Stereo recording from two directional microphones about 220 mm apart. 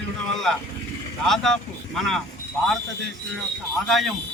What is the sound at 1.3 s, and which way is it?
Speech, centre (ahead or behind).